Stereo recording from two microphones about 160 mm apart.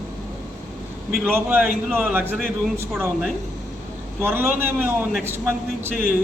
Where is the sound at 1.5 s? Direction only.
10° right (ahead or behind).